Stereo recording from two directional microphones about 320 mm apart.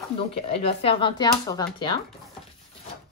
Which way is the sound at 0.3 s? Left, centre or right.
Centre.